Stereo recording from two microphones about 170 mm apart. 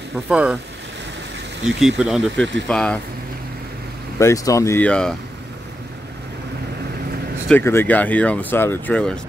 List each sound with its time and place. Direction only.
0.3 s speech: 5° right (ahead or behind)
1.8 s speech: 5° right (ahead or behind)
4.2 s speech: 20° left (ahead or behind)
7.4 s speech: 10° left (ahead or behind)